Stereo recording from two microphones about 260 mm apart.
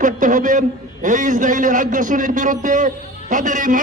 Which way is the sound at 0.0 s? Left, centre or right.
Right.